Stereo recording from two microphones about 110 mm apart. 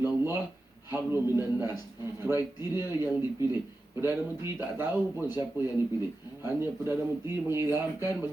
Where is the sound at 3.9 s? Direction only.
20° right (ahead or behind).